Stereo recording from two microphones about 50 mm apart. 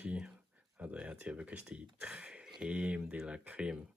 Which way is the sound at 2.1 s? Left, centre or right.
Right.